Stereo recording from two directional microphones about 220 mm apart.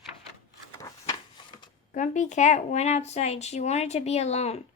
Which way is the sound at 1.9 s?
35° left (ahead or behind).